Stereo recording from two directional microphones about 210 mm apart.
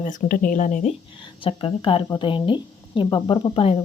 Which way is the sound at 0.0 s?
35° left (ahead or behind).